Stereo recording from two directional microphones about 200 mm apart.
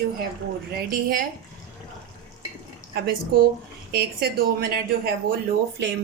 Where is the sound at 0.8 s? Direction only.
45° right (ahead or behind).